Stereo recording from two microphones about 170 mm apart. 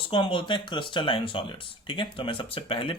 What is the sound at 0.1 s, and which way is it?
Speech, 30° left (ahead or behind).